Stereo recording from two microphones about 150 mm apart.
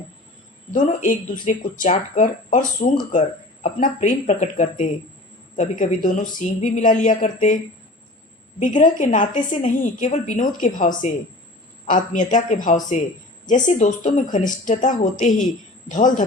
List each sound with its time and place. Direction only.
0.7 s a woman's voice: 60° left (ahead or behind)
6.1 s a woman's voice: 55° left (ahead or behind)